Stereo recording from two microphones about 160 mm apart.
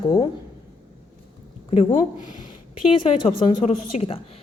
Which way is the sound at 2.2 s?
55° left (ahead or behind).